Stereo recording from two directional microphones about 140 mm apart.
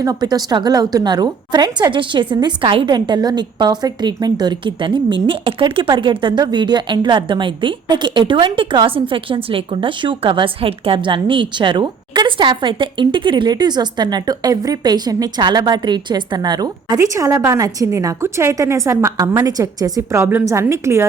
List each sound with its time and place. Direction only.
0.0 s a woman's voice: 25° right (ahead or behind)